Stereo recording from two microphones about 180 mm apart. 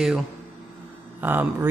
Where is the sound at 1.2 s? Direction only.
10° right (ahead or behind).